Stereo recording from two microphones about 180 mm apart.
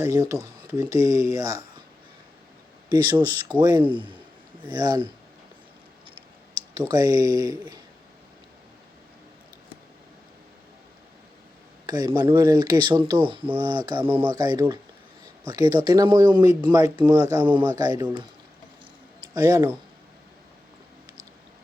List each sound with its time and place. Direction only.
0.0 s speech: 15° right (ahead or behind)
2.9 s speech: 25° right (ahead or behind)
6.7 s speech: 20° right (ahead or behind)
11.9 s speech: 20° right (ahead or behind)
14.0 s speech: 10° right (ahead or behind)
14.3 s speech: 20° right (ahead or behind)